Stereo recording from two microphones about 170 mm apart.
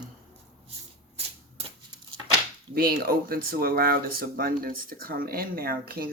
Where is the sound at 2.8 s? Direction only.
60° right (ahead or behind).